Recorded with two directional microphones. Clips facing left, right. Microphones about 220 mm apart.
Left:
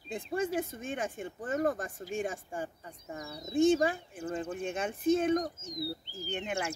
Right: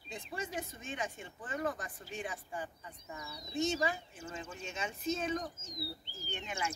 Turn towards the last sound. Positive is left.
turn(degrees=55)  # may be behind; listen again after turning